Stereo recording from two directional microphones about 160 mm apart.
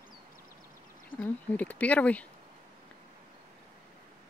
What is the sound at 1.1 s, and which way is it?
Speech, 10° left (ahead or behind).